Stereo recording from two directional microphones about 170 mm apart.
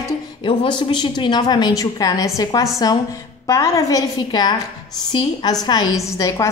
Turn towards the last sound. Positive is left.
turn(degrees=15)  # may be behind; listen again after turning